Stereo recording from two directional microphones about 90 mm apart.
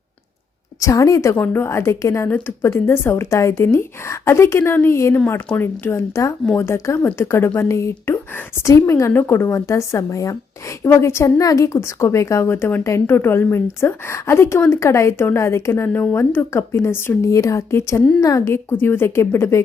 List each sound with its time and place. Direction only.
0.8 s a woman's voice: 35° left (ahead or behind)